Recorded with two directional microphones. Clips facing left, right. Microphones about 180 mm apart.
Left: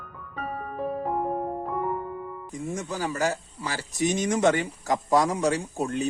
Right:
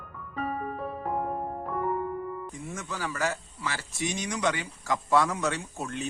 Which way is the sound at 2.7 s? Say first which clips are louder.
Left 7 dB; 35° left (ahead or behind).